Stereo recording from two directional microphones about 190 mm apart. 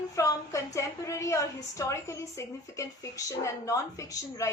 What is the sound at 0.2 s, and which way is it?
A woman's voice, 15° left (ahead or behind).